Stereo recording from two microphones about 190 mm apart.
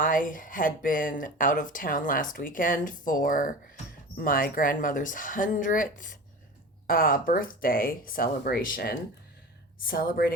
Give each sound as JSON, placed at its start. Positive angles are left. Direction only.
{"t": 0.0, "sound": "speech", "side_deg": 45}